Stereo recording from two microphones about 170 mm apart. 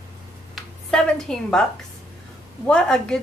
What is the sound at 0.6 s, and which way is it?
A woman's voice, 5° left (ahead or behind).